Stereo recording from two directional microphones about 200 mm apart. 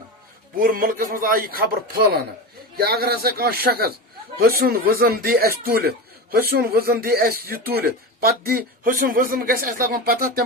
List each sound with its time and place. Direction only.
0.5 s speech: 45° right (ahead or behind)
2.7 s speech: 50° right (ahead or behind)